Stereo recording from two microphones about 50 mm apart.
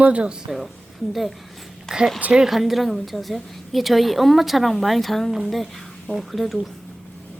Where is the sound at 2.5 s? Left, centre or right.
Centre.